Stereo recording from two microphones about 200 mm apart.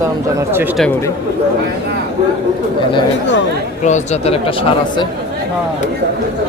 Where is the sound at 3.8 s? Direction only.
35° left (ahead or behind).